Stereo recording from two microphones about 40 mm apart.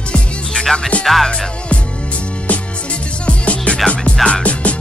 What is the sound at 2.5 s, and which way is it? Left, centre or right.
Music, left.